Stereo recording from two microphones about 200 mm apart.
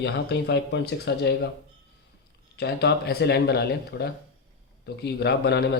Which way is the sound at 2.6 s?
55° left (ahead or behind).